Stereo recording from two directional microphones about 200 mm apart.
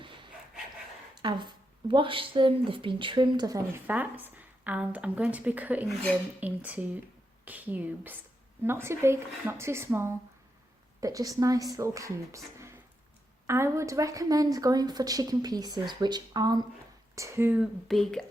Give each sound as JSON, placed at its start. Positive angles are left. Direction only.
{"t": 1.1, "sound": "a woman's voice", "side_deg": -20}